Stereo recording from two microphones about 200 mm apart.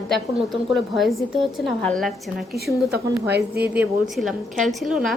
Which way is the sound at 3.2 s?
55° right (ahead or behind).